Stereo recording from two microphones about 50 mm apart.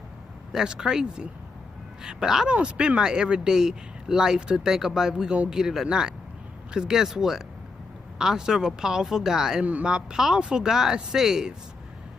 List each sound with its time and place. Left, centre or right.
0.5 s speech: centre
9.6 s speech: right
9.8 s speech: centre